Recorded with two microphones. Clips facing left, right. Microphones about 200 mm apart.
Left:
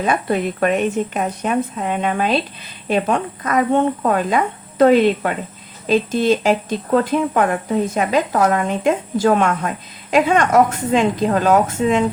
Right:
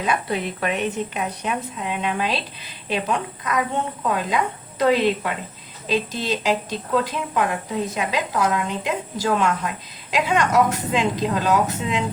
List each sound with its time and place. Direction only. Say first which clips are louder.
0.0 s speech: left 5 dB; 50° left (ahead or behind)